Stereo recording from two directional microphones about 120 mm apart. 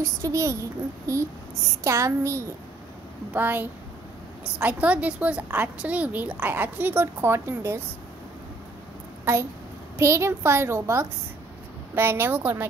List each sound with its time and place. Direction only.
0.0 s a child's voice: 25° right (ahead or behind)
9.2 s a child's voice: 20° right (ahead or behind)